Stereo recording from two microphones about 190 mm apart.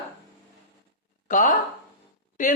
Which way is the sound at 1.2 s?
45° left (ahead or behind).